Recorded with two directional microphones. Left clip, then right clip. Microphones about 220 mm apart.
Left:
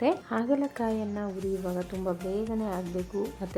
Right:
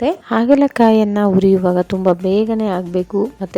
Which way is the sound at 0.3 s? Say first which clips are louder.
Right 15 dB; 45° right (ahead or behind).